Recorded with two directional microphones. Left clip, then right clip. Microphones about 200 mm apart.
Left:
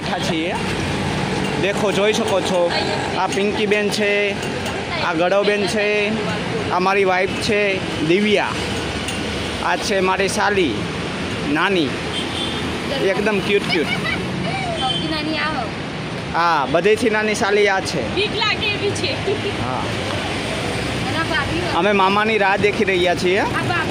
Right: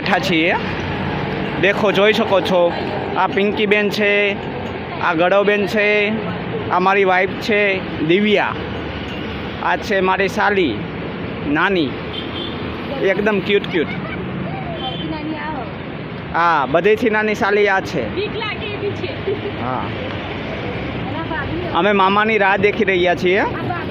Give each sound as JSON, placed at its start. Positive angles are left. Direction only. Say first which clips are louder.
{"t": 0.1, "sound": "speech", "louder": "right 6 dB", "side_deg": -5}
{"t": 1.6, "sound": "speech", "louder": "right 5 dB", "side_deg": 0}
{"t": 9.6, "sound": "speech", "louder": "right 2 dB", "side_deg": 5}
{"t": 13.1, "sound": "speech", "louder": "right 3 dB", "side_deg": 0}
{"t": 16.3, "sound": "speech", "louder": "right 2 dB", "side_deg": 0}
{"t": 21.8, "sound": "speech", "louder": "right 2 dB", "side_deg": 5}